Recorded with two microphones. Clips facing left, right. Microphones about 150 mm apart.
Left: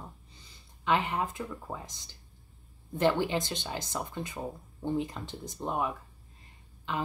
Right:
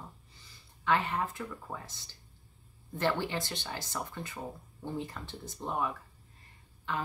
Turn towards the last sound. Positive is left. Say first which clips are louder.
# left 2 dB
turn(degrees=15)  # may be behind; listen again after turning